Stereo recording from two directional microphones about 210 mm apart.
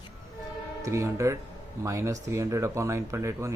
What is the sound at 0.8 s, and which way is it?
Speech, 15° right (ahead or behind).